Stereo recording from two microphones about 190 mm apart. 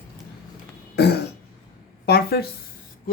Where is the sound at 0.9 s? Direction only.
60° left (ahead or behind).